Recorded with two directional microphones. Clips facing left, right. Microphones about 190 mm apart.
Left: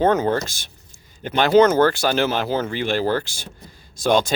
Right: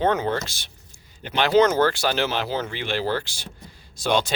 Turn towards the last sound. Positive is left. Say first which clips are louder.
# left 4 dB
turn(degrees=45)  # may be behind; listen again after turning